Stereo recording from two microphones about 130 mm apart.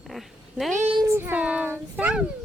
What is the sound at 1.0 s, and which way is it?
A child's voice, 20° right (ahead or behind).